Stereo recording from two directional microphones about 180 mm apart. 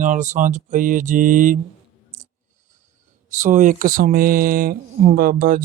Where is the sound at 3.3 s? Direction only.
45° right (ahead or behind).